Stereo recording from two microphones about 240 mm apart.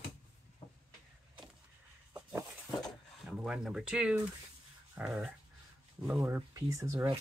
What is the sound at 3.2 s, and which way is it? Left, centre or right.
Speech, centre.